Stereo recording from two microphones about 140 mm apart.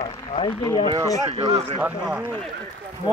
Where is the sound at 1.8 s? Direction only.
5° right (ahead or behind).